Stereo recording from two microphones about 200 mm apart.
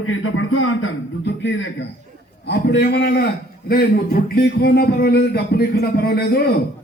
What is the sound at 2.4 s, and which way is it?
Speech, 55° left (ahead or behind).